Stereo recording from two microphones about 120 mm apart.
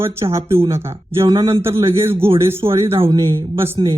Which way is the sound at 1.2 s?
45° right (ahead or behind).